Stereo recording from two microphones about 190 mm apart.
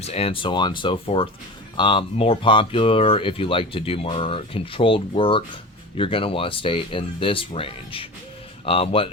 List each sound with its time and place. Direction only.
0.0 s speech: 35° left (ahead or behind)